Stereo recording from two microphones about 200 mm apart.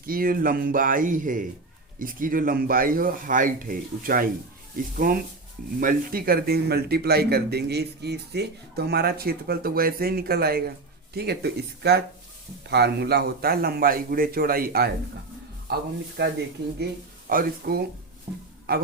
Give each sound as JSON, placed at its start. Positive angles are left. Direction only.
{"t": 0.0, "sound": "a man's voice", "side_deg": -45}